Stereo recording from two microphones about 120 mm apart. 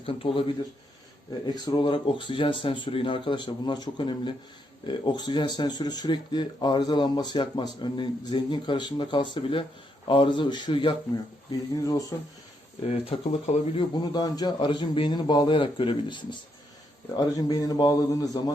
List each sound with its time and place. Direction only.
0.0 s speech: 50° left (ahead or behind)
1.3 s speech: 35° left (ahead or behind)
11.8 s speech: 30° left (ahead or behind)
12.8 s speech: 60° left (ahead or behind)
14.0 s speech: 35° left (ahead or behind)
17.2 s speech: 30° left (ahead or behind)